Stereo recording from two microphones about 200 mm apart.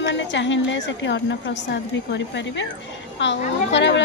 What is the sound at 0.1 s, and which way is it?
A woman's voice, 65° left (ahead or behind).